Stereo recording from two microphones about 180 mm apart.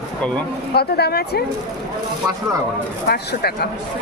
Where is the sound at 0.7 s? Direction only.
60° left (ahead or behind).